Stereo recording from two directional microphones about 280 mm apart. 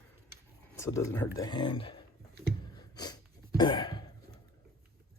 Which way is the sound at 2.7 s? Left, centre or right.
Centre.